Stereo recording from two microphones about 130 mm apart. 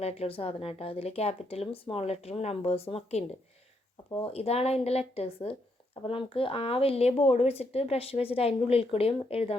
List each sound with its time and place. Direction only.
0.0 s speech: 50° left (ahead or behind)
4.3 s speech: 50° left (ahead or behind)